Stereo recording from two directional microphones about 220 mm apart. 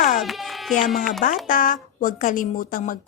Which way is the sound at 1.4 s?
40° left (ahead or behind).